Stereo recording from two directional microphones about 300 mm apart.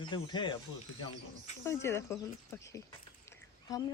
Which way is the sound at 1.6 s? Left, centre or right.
Centre.